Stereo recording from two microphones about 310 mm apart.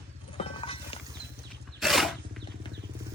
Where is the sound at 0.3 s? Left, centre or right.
Centre.